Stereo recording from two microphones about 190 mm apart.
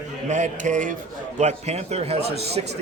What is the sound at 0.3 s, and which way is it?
A man's voice, 40° right (ahead or behind).